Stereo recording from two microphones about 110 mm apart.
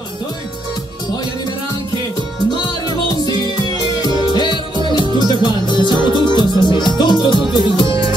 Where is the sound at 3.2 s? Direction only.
40° left (ahead or behind).